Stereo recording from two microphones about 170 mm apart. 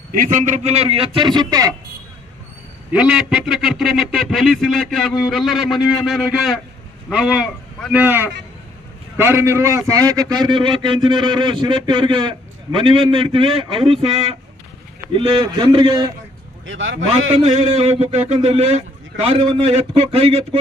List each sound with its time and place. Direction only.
0.1 s a man's voice: 50° right (ahead or behind); by 1.7 s 20° right (ahead or behind)
2.9 s a man's voice: 5° right (ahead or behind)
8.0 s a man's voice: 10° right (ahead or behind)
16.6 s a man's voice: 90° right
17.1 s a man's voice: 40° right (ahead or behind)